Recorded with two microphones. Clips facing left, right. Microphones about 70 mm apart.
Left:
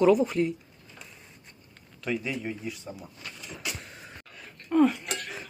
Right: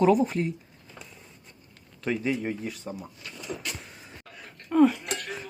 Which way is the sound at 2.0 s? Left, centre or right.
Right.